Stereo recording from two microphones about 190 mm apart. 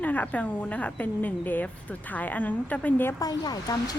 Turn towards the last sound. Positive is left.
turn(degrees=20)  # may be behind; listen again after turning